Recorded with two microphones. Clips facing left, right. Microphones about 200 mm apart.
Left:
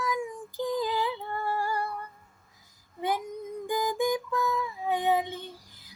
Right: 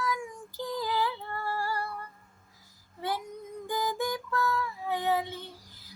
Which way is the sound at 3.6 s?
15° left (ahead or behind).